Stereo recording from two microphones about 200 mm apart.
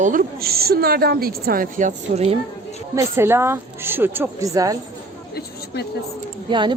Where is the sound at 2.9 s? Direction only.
10° right (ahead or behind).